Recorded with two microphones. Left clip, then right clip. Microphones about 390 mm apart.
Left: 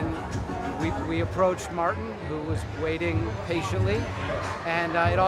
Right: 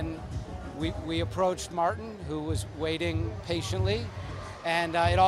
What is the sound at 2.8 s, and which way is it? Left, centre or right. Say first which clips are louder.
Speech: left 3 dB; right.